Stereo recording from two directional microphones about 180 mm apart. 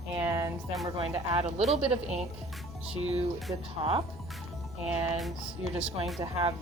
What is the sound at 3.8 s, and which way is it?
Speech, 25° right (ahead or behind).